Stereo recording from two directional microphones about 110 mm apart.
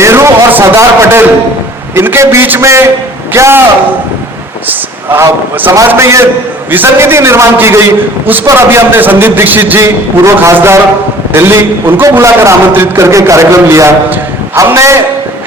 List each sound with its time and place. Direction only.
0.0 s a sound: 25° right (ahead or behind)
2.0 s a man's voice: 25° right (ahead or behind)
5.0 s a man's voice: 20° right (ahead or behind)